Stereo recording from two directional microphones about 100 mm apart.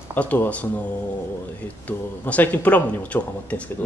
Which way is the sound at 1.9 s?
15° left (ahead or behind).